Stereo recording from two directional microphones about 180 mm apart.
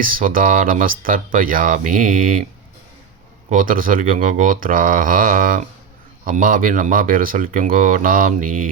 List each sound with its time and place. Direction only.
0.0 s speech: 50° right (ahead or behind)
3.5 s speech: 50° right (ahead or behind)